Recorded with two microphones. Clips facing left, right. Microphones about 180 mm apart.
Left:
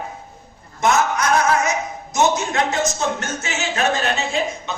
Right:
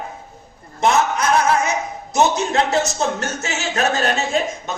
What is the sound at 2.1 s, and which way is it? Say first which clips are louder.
Speech: right 2 dB; 35° right (ahead or behind).